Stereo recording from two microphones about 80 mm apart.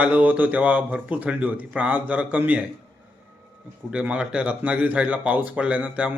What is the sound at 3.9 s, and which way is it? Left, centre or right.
A man's voice, centre.